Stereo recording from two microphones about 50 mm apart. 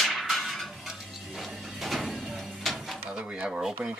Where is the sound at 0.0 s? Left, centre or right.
Centre.